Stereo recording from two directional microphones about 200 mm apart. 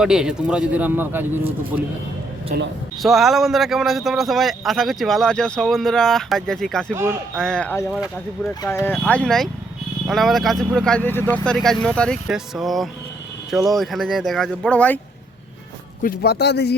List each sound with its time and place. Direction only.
0.0 s a man's voice: 5° right (ahead or behind)
2.5 s speech: 45° right (ahead or behind)
3.0 s a man's voice: centre (ahead or behind)
6.9 s speech: 10° right (ahead or behind)
7.3 s a man's voice: 5° left (ahead or behind)
16.0 s a man's voice: 55° left (ahead or behind)